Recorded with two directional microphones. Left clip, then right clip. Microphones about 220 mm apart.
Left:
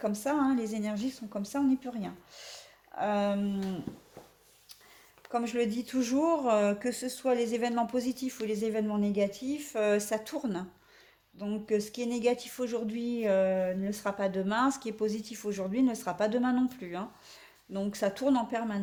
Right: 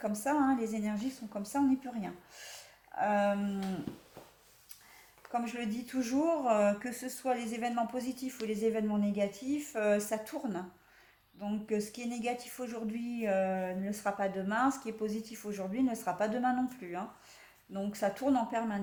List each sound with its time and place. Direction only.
0.0 s speech: 35° left (ahead or behind)
5.3 s speech: 40° left (ahead or behind)